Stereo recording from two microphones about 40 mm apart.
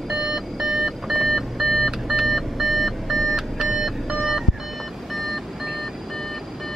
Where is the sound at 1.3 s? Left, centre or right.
Centre.